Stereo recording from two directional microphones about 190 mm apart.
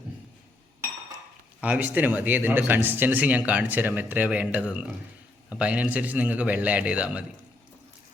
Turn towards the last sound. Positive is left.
turn(degrees=-5)  # may be behind; listen again after turning